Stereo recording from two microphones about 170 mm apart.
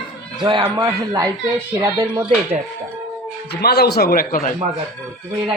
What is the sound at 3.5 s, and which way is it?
A man's voice, 70° left (ahead or behind).